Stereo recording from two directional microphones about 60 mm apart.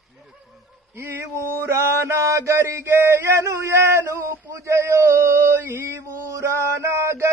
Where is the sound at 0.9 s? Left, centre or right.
Right.